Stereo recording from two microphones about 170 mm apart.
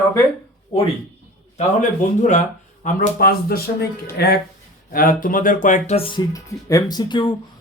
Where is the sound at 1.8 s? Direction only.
45° left (ahead or behind).